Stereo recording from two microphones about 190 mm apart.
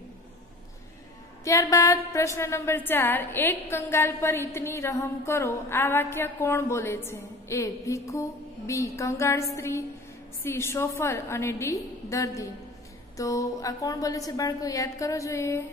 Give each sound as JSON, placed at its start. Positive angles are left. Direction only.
{"t": 1.4, "sound": "a woman's voice", "side_deg": 15}